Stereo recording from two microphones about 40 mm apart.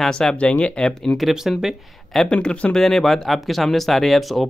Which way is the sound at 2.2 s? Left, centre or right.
Left.